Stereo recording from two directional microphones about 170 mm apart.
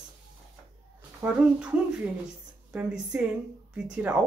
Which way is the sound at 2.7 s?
5° right (ahead or behind).